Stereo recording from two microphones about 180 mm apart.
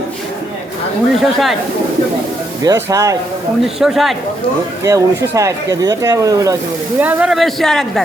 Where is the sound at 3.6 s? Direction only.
Centre (ahead or behind).